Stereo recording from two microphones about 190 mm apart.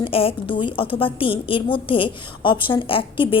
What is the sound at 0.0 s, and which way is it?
A woman's voice, 30° left (ahead or behind).